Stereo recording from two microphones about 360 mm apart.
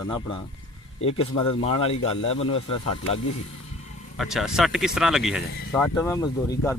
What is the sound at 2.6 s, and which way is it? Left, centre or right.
Speech, left.